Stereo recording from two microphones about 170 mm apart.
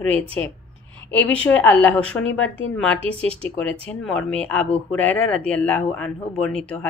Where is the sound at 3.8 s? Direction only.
5° left (ahead or behind).